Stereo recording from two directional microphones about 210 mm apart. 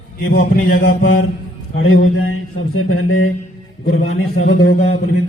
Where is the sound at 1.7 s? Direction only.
80° left.